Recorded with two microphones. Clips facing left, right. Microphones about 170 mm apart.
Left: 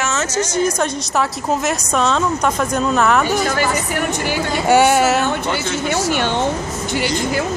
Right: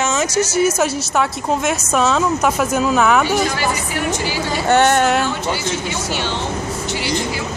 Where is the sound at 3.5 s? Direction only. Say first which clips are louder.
Left 2 dB; 50° left (ahead or behind).